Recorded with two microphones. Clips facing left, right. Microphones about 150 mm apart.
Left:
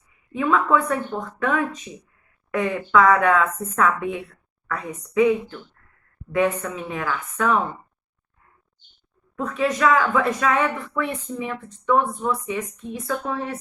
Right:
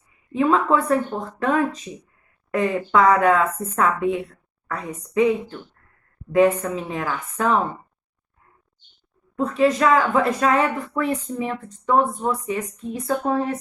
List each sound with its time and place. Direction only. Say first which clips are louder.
0.3 s a woman's voice: right 1 dB; 35° right (ahead or behind)
9.3 s a woman's voice: right 5 dB; 30° right (ahead or behind)